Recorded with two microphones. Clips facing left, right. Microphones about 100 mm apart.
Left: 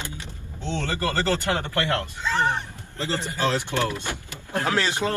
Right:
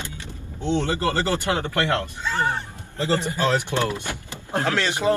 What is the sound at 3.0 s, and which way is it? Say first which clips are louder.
Speech: right 4 dB; 20° right (ahead or behind).